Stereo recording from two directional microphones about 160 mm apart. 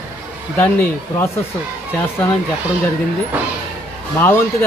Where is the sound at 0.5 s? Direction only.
10° left (ahead or behind).